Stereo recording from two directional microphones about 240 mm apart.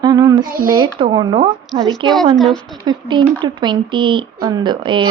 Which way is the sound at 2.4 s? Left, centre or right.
Centre.